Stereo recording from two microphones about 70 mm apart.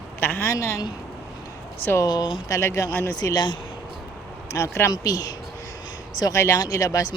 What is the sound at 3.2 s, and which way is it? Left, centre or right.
Speech, left.